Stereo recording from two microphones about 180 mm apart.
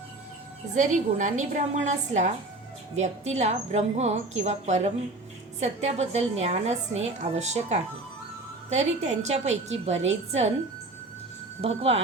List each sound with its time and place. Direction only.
0.7 s a woman's voice: 45° right (ahead or behind)
11.6 s a woman's voice: 35° right (ahead or behind)